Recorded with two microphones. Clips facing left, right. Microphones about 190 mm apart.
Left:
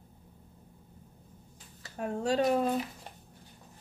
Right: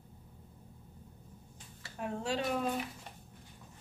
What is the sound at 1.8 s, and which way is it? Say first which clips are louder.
Speech: left 5 dB; 40° left (ahead or behind).